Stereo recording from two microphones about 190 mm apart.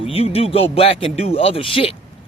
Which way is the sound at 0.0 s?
30° left (ahead or behind).